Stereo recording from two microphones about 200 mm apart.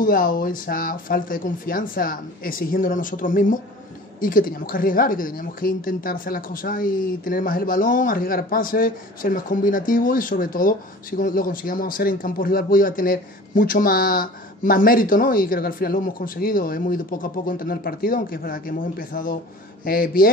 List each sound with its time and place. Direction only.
0.0 s speech: 45° left (ahead or behind)